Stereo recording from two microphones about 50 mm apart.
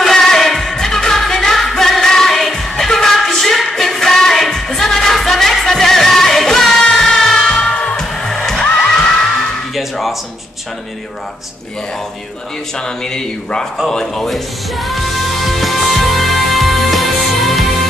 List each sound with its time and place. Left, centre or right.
0.0 s music: centre
7.6 s music: left
8.0 s music: centre
9.8 s music: centre
12.7 s speech: centre
14.3 s music: centre